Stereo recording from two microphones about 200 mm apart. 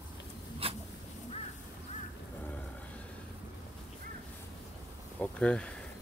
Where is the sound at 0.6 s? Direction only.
30° right (ahead or behind).